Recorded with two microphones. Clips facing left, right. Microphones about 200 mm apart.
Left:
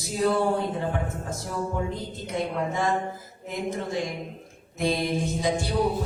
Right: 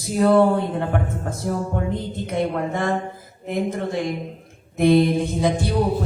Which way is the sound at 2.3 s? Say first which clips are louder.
Right 4 dB; 60° right (ahead or behind).